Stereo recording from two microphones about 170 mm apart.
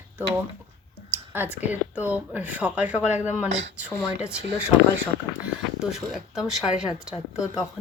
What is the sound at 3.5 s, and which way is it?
Speech, 90° right.